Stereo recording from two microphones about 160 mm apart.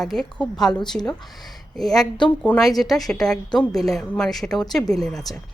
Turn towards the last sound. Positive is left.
turn(degrees=5)  # may be behind; listen again after turning